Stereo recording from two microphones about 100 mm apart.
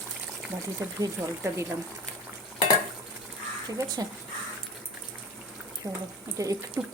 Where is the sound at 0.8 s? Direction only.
25° right (ahead or behind).